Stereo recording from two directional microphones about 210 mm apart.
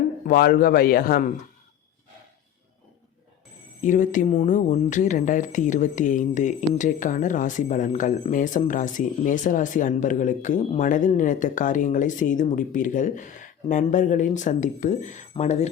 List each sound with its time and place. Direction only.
0.3 s a man's voice: 45° left (ahead or behind)
3.8 s speech: 40° left (ahead or behind)